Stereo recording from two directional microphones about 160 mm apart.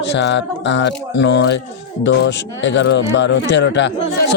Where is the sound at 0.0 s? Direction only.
90° left.